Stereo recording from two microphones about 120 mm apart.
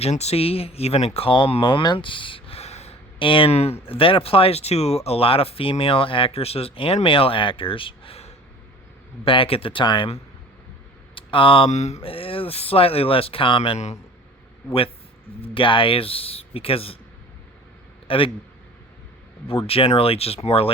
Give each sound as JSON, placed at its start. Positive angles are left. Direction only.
{"t": 0.0, "sound": "speech", "side_deg": 65}
{"t": 11.1, "sound": "a sound", "side_deg": 45}
{"t": 11.7, "sound": "a sound", "side_deg": 70}
{"t": 12.0, "sound": "speech", "side_deg": 50}
{"t": 15.4, "sound": "speech", "side_deg": 45}
{"t": 18.1, "sound": "speech", "side_deg": 50}
{"t": 19.5, "sound": "speech", "side_deg": 55}